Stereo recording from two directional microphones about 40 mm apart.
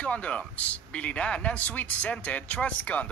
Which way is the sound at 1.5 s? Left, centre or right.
Left.